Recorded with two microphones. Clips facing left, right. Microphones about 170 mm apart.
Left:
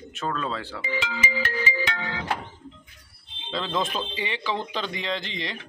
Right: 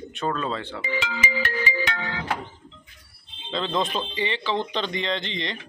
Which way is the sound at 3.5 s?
5° left (ahead or behind).